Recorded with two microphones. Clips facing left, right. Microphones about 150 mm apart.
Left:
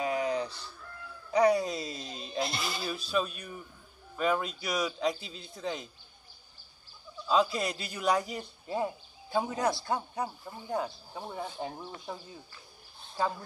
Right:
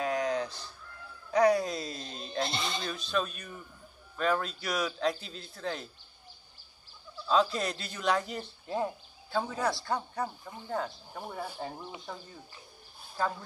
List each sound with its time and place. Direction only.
0.0 s fowl: 5° left (ahead or behind)
1.3 s a sound: 5° left (ahead or behind)
3.1 s speech: 5° left (ahead or behind)
7.2 s speech: 10° left (ahead or behind)
9.3 s a man's voice: 15° left (ahead or behind)
10.4 s speech: 10° left (ahead or behind)
11.1 s speech: centre (ahead or behind)